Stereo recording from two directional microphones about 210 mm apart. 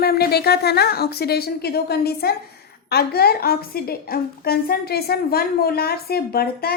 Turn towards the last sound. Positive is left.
turn(degrees=50)  # may be behind; listen again after turning